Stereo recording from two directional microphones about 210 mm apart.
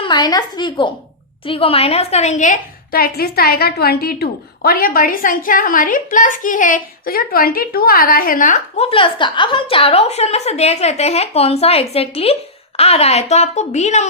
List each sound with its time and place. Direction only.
0.0 s a woman's voice: 20° left (ahead or behind)